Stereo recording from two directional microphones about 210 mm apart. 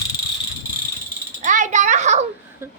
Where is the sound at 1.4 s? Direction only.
35° right (ahead or behind).